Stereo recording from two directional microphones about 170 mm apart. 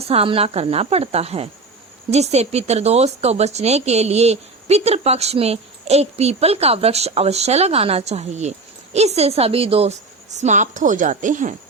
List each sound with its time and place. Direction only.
0.1 s speech: 35° right (ahead or behind)